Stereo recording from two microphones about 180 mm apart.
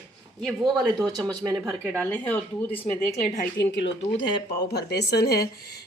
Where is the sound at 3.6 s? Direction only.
80° left.